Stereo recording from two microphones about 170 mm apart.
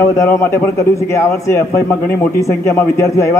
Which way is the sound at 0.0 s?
15° left (ahead or behind).